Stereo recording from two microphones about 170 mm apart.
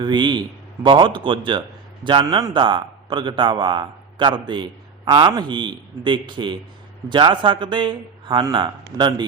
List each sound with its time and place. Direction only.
0.0 s a man's voice: 25° right (ahead or behind)